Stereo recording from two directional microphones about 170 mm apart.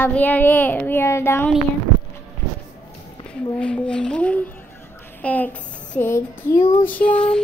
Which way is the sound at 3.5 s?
5° left (ahead or behind).